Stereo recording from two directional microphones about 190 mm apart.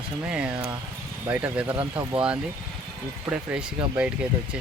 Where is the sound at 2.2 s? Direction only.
5° right (ahead or behind).